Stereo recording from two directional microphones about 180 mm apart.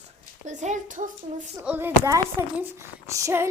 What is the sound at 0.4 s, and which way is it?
Speech, 40° right (ahead or behind).